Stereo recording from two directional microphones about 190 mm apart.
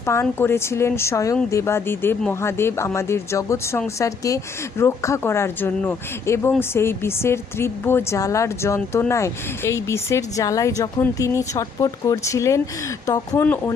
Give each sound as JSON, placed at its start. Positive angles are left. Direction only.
{"t": 0.0, "sound": "speech", "side_deg": 15}